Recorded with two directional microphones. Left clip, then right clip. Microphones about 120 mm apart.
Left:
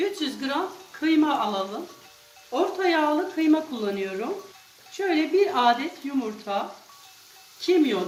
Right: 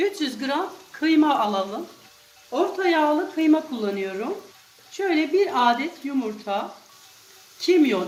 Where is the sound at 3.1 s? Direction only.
25° right (ahead or behind).